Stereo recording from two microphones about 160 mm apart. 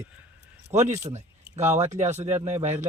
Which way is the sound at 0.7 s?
45° right (ahead or behind).